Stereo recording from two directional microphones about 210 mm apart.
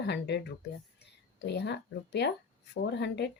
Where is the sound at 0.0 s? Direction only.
55° left (ahead or behind).